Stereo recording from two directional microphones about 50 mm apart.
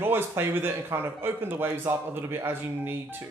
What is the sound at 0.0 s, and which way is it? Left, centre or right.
Speech, right.